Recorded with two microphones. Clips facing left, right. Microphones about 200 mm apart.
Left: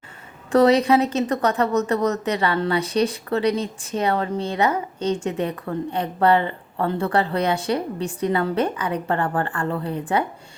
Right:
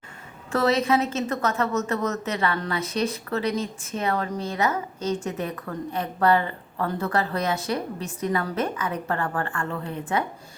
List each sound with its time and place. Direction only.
0.5 s a woman's voice: 35° left (ahead or behind)